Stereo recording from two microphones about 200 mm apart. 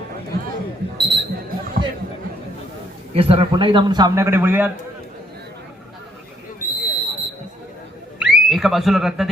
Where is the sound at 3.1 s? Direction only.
30° right (ahead or behind); by 4.7 s 10° right (ahead or behind).